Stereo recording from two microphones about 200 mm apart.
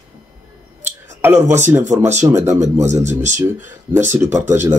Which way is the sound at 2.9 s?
35° right (ahead or behind).